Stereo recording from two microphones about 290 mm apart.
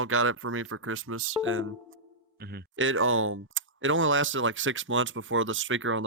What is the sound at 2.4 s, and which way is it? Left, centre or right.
Speech, right.